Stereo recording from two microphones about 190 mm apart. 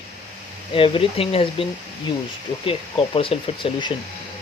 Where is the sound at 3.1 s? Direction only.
30° left (ahead or behind).